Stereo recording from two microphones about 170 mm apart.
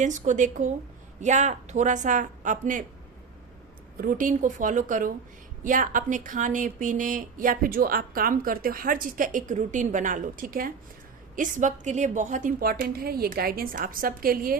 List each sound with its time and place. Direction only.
0.0 s speech: 45° right (ahead or behind)
3.9 s a woman's voice: 55° right (ahead or behind)